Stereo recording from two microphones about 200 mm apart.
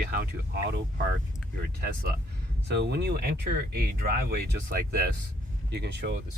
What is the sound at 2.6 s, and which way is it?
Speech, 55° right (ahead or behind).